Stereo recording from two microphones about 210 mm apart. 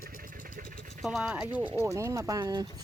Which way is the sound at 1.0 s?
5° right (ahead or behind).